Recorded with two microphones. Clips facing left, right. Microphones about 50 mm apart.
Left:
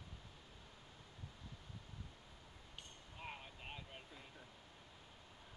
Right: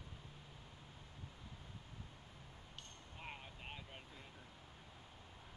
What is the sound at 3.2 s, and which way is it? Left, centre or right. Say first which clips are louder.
Vehicle: left 1 dB; centre.